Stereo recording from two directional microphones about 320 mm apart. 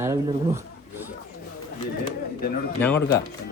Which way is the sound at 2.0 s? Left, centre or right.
Left.